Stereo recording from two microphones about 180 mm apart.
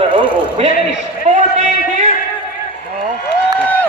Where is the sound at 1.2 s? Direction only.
40° right (ahead or behind).